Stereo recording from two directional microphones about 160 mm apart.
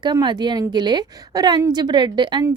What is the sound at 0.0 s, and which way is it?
A woman's voice, 25° right (ahead or behind).